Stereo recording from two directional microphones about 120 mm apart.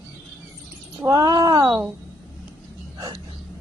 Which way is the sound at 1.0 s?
35° right (ahead or behind).